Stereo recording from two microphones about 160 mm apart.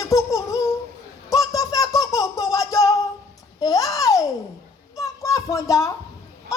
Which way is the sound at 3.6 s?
20° left (ahead or behind).